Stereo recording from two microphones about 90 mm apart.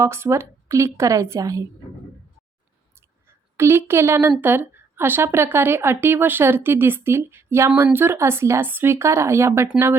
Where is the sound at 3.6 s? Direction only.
30° right (ahead or behind).